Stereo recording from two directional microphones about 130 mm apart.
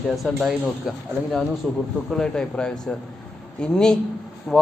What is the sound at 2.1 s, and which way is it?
Speech, 5° left (ahead or behind).